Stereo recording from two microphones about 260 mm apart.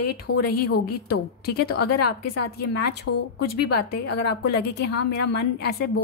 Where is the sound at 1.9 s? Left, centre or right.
Left.